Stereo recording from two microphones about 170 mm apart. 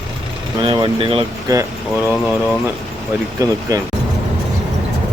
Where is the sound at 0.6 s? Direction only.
25° right (ahead or behind).